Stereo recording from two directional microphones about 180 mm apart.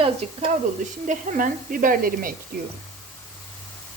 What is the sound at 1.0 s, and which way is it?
A woman's voice, 45° right (ahead or behind).